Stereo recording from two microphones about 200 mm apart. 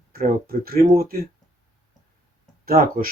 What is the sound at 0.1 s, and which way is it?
Speech, 45° right (ahead or behind).